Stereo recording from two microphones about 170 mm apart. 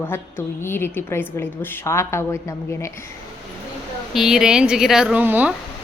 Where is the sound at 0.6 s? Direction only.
15° left (ahead or behind).